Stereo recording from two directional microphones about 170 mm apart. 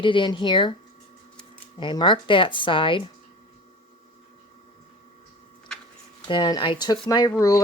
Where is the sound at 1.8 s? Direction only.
30° left (ahead or behind).